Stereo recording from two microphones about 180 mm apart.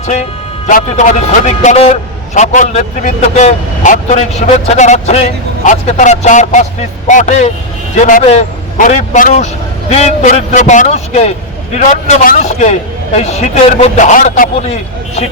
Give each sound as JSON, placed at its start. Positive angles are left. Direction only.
{"t": 0.7, "sound": "a man's voice", "side_deg": 45}